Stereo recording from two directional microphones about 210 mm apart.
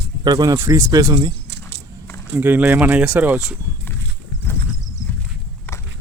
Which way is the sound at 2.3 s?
10° right (ahead or behind).